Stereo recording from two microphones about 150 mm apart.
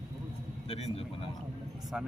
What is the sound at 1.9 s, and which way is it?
Battle cry, 5° right (ahead or behind).